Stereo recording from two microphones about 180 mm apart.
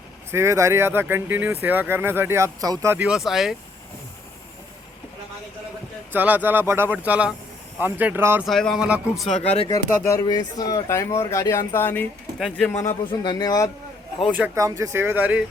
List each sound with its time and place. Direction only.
0.3 s speech: 15° right (ahead or behind)
6.1 s speech: 10° right (ahead or behind)
8.4 s speech: centre (ahead or behind)
9.3 s speech: 35° left (ahead or behind)
9.6 s speech: 20° left (ahead or behind)
12.8 s a man's voice: 20° left (ahead or behind)
14.3 s speech: 15° right (ahead or behind)